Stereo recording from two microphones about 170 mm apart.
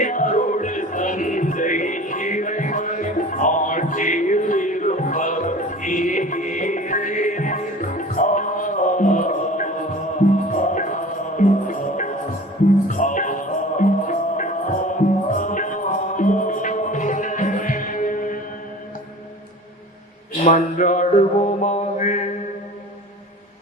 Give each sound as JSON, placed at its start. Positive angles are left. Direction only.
{"t": 0.0, "sound": "music", "side_deg": 50}
{"t": 20.4, "sound": "mantra", "side_deg": 50}